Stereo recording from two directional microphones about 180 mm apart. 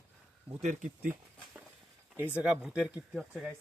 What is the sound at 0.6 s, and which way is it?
Speech, 45° right (ahead or behind).